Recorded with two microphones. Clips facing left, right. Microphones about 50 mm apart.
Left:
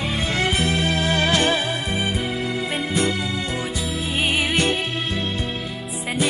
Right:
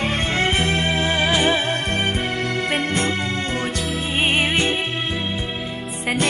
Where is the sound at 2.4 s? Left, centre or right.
Right.